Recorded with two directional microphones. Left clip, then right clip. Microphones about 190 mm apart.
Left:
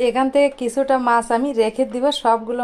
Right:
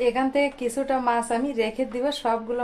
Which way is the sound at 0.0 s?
35° left (ahead or behind).